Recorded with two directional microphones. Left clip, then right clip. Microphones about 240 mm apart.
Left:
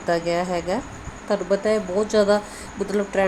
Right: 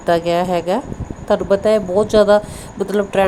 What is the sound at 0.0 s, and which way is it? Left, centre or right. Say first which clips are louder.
A woman's voice: right 6 dB; right.